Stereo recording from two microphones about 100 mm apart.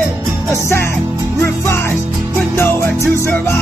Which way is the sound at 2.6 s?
25° left (ahead or behind).